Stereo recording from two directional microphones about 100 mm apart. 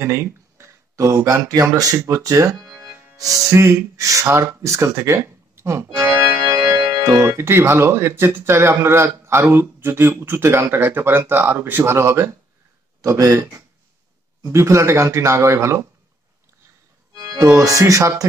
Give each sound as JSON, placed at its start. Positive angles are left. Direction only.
{"t": 0.0, "sound": "speech", "side_deg": -30}
{"t": 5.9, "sound": "organ", "side_deg": -35}
{"t": 7.0, "sound": "speech", "side_deg": -30}
{"t": 17.1, "sound": "music", "side_deg": -40}
{"t": 17.6, "sound": "speech", "side_deg": -35}